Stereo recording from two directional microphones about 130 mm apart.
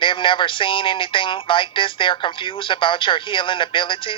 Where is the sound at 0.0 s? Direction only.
40° left (ahead or behind).